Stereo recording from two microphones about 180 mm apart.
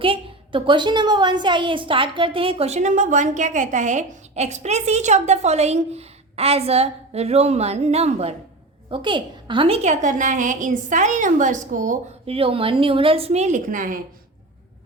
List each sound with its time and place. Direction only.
0.0 s a woman's voice: 30° right (ahead or behind); by 12.1 s 45° right (ahead or behind)
12.2 s a woman's voice: 30° right (ahead or behind); by 14.0 s 50° right (ahead or behind)